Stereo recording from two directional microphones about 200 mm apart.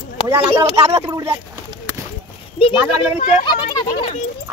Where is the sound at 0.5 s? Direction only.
30° right (ahead or behind).